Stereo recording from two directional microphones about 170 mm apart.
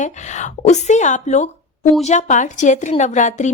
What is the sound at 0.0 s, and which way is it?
A woman's voice, 45° left (ahead or behind).